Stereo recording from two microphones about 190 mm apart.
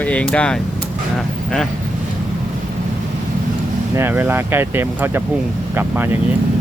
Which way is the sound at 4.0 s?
10° right (ahead or behind).